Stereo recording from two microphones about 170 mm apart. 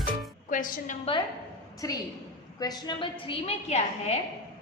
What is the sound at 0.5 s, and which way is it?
Speech, 50° left (ahead or behind).